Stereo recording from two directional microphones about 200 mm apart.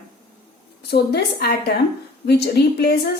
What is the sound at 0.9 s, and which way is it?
A woman's voice, 50° left (ahead or behind).